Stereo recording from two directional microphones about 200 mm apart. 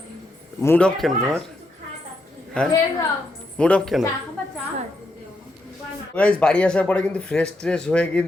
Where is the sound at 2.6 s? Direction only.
5° left (ahead or behind).